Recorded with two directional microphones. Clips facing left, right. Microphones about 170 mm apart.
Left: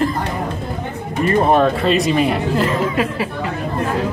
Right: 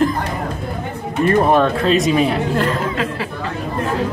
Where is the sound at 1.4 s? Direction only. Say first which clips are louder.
Left 3 dB; centre (ahead or behind).